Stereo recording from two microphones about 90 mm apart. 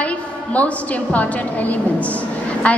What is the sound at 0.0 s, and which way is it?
A woman's voice, 15° left (ahead or behind).